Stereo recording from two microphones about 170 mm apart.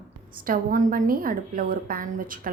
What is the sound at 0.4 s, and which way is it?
A woman's voice, 55° right (ahead or behind).